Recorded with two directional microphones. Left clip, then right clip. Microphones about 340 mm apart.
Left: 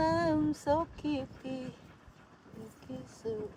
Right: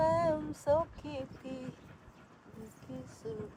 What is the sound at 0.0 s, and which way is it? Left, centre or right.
Music, left.